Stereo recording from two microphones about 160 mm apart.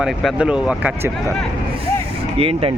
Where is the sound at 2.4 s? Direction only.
35° right (ahead or behind).